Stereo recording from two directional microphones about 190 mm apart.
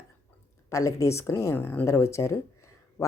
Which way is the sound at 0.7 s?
15° left (ahead or behind).